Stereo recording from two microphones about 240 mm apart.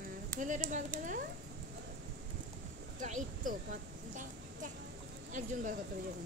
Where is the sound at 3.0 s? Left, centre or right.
Right.